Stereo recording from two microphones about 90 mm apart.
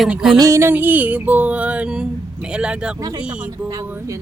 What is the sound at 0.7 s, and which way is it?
A woman's voice, 20° right (ahead or behind).